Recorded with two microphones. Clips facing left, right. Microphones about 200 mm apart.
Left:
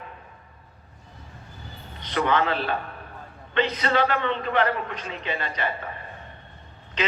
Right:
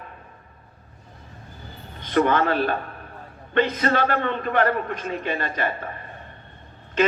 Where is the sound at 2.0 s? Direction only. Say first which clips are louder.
Right 4 dB; 50° right (ahead or behind).